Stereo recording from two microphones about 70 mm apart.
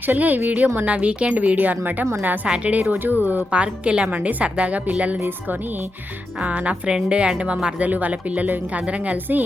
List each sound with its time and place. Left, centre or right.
0.0 s a woman's voice: right
6.4 s a woman's voice: centre